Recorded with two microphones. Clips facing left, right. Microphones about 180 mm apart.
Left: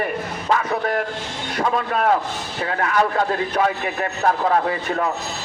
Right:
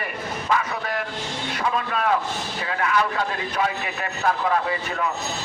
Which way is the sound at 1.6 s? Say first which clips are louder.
Left 5 dB; 45° left (ahead or behind).